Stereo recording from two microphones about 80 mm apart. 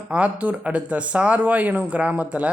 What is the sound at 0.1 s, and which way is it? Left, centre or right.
Speech, centre.